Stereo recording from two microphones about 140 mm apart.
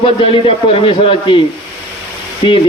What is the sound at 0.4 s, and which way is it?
Speech, 40° left (ahead or behind).